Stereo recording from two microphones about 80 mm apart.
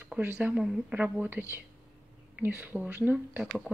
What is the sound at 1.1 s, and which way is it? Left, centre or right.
Speech, right.